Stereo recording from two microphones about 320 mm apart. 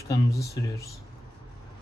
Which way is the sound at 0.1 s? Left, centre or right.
Centre.